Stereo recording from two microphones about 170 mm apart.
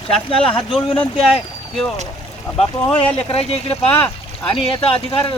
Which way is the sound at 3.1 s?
35° left (ahead or behind).